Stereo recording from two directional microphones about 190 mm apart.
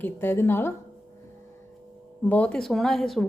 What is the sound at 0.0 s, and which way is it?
Speech, 10° left (ahead or behind).